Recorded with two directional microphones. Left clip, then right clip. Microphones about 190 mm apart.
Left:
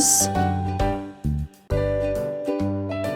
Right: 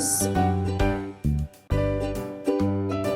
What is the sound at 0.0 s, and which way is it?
Music, 40° left (ahead or behind).